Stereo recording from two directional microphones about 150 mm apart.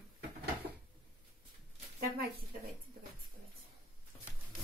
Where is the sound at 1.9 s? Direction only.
90° right.